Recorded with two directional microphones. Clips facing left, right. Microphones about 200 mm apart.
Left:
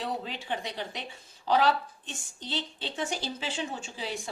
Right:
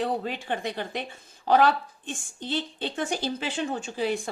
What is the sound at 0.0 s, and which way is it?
A woman's voice, 50° right (ahead or behind).